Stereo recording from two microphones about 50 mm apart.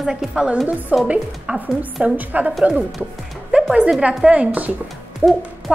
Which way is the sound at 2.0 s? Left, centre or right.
Right.